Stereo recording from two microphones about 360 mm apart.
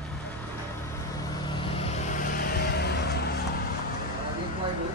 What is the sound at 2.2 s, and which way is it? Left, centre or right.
Music, left.